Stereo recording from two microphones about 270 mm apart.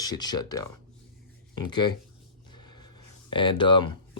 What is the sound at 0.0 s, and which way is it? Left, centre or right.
Speech, centre.